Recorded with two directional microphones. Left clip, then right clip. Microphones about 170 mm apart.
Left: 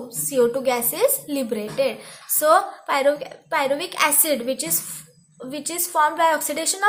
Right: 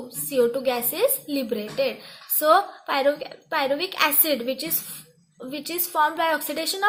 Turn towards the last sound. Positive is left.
turn(degrees=-30)  # may be behind; listen again after turning